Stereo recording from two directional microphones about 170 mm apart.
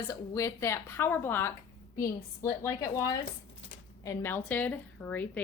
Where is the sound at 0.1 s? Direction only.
20° left (ahead or behind).